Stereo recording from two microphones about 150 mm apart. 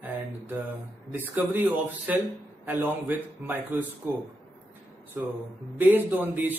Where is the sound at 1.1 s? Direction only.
15° right (ahead or behind).